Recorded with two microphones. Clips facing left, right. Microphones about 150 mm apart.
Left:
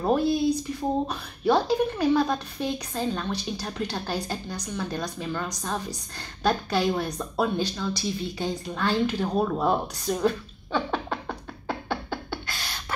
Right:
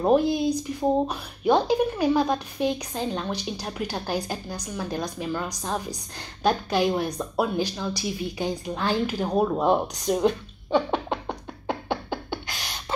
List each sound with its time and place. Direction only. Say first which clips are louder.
0.0 s a woman's voice: right 2 dB; 15° right (ahead or behind)